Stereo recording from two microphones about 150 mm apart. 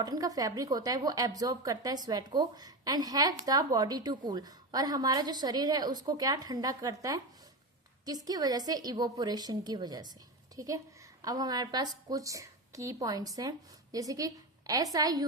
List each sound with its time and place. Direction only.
0.0 s a woman's voice: 25° right (ahead or behind)